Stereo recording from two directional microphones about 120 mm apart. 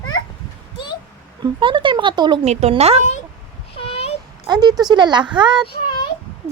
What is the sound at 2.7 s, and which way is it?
Speech, 60° right (ahead or behind).